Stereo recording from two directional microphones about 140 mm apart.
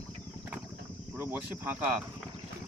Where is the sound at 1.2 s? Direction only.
15° right (ahead or behind).